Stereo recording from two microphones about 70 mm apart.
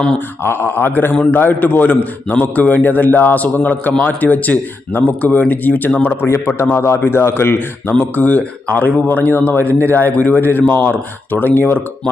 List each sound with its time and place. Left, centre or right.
0.4 s a man's voice: left
6.2 s speech: left
7.9 s a man's voice: left